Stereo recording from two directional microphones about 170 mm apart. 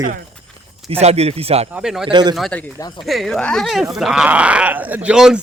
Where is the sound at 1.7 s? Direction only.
5° right (ahead or behind).